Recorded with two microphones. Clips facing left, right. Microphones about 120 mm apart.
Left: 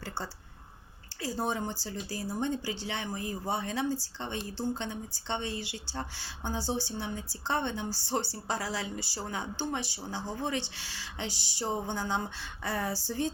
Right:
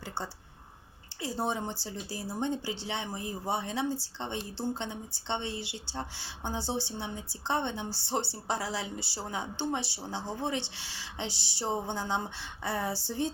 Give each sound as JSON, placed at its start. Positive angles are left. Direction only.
{"t": 1.2, "sound": "a woman's voice", "side_deg": -25}